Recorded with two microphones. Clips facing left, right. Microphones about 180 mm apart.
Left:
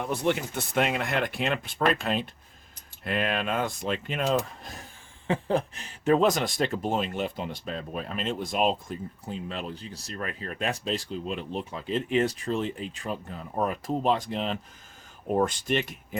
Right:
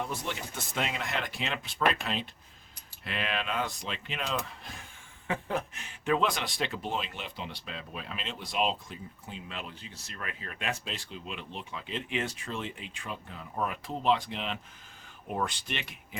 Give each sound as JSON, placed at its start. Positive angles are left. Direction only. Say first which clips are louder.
{"t": 0.0, "sound": "speech", "louder": "left 9 dB", "side_deg": 60}
{"t": 5.3, "sound": "speech", "louder": "left 6 dB", "side_deg": 30}